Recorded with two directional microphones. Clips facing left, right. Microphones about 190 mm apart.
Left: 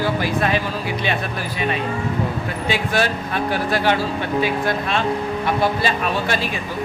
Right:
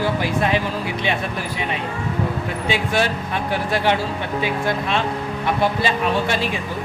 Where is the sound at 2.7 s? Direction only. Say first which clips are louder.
Even; 20° right (ahead or behind).